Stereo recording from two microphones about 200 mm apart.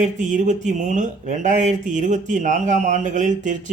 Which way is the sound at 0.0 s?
40° right (ahead or behind).